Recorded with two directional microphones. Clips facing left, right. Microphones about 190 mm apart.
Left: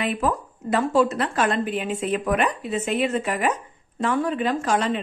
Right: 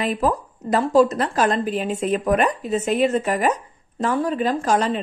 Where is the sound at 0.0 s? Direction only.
40° right (ahead or behind).